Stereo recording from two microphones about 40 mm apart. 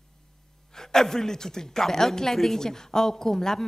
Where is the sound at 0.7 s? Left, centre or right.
Centre.